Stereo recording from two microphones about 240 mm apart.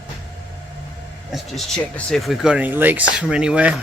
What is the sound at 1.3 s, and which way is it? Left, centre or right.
Speech, centre.